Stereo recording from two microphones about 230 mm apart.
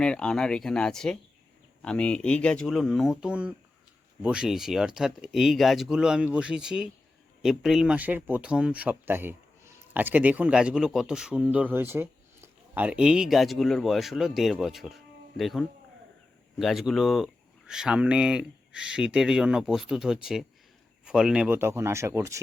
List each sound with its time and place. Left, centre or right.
0.0 s speech: centre